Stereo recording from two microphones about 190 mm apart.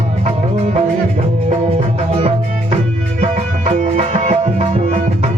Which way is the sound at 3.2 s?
35° right (ahead or behind).